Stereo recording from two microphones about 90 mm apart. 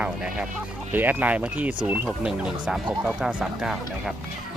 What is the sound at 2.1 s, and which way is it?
Speech, 10° right (ahead or behind).